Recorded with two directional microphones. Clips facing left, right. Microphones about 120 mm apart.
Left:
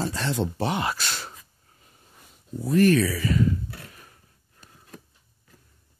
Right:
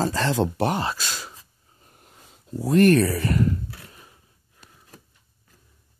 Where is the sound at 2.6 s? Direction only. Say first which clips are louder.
Right 3 dB; 55° right (ahead or behind).